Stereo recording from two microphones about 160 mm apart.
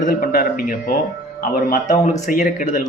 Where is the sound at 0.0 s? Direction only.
60° left (ahead or behind).